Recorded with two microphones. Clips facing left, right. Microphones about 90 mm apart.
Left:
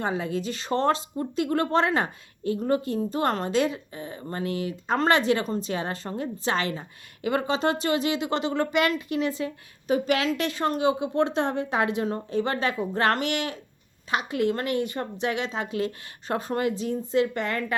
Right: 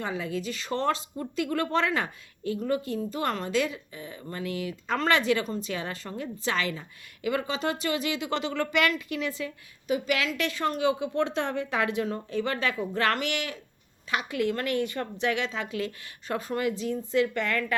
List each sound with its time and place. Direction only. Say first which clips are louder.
0.0 s a woman's voice: left 4 dB; 30° left (ahead or behind)